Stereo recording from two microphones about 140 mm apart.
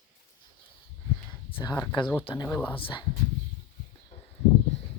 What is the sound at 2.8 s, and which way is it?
Speech, 40° left (ahead or behind).